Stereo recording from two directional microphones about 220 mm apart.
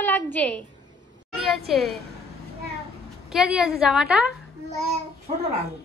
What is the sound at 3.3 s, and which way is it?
A woman's voice, 5° right (ahead or behind).